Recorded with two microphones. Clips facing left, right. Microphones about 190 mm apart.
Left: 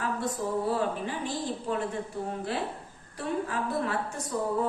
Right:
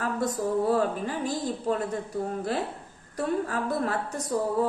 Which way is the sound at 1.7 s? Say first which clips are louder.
Right 4 dB; 40° right (ahead or behind).